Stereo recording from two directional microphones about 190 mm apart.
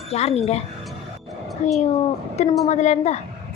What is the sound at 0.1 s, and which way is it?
Speech, 35° left (ahead or behind).